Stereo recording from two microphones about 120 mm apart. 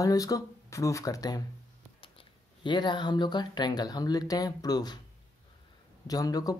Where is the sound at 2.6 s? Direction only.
40° left (ahead or behind).